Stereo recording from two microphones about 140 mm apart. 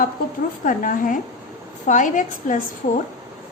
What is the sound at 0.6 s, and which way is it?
Speech, 75° left (ahead or behind).